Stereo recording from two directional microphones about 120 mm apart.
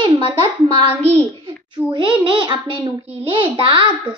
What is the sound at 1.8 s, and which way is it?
A child's voice, 40° right (ahead or behind).